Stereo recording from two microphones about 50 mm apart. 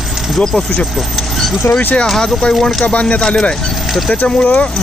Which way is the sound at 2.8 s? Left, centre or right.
Left.